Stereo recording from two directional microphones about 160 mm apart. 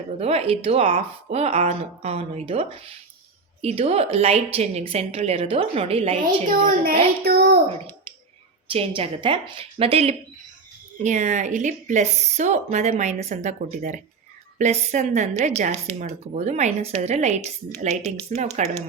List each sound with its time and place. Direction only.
0.2 s speech: 40° right (ahead or behind)
6.7 s a woman's voice: 65° right (ahead or behind); by 7.6 s 80° right
8.7 s speech: 35° right (ahead or behind)